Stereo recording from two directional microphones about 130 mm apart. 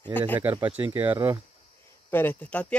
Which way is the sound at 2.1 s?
15° left (ahead or behind).